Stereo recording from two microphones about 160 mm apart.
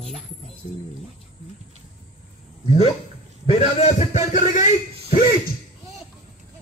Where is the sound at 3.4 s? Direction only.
40° left (ahead or behind).